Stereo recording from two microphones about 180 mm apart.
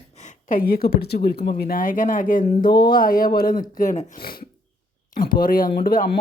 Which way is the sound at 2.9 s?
50° left (ahead or behind).